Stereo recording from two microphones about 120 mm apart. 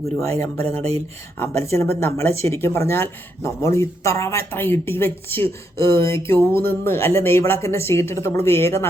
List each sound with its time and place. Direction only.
0.2 s speech: 25° left (ahead or behind)